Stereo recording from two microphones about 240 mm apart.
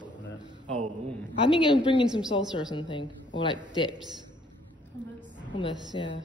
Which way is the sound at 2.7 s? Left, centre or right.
Centre.